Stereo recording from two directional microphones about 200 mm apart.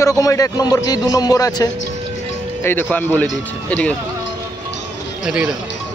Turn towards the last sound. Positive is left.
turn(degrees=-5)  # may be behind; listen again after turning